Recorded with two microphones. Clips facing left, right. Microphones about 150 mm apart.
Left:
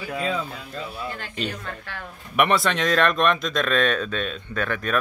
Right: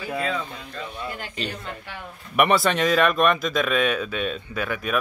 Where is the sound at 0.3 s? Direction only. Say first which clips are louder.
Left 1 dB; 5° left (ahead or behind).